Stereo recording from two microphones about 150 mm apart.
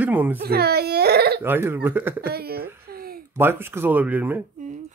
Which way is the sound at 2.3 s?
90° right.